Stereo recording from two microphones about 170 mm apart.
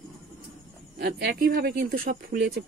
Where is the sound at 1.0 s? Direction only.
70° right (ahead or behind).